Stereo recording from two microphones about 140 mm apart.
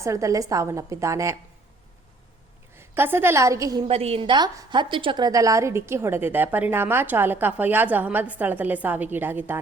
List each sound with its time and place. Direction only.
0.0 s a woman's voice: 20° right (ahead or behind)
2.7 s a woman's voice: 15° right (ahead or behind)
3.8 s a woman's voice: 45° right (ahead or behind); by 9.6 s 15° right (ahead or behind)